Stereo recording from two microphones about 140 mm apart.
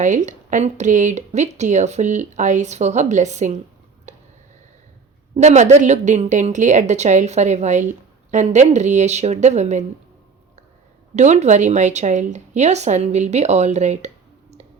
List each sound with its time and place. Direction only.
0.0 s speech: 60° right (ahead or behind)
4.1 s a sound: 55° right (ahead or behind)
5.4 s speech: 55° right (ahead or behind)
11.1 s speech: 55° right (ahead or behind)